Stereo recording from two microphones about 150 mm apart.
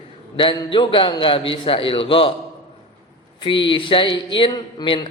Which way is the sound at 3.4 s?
35° left (ahead or behind).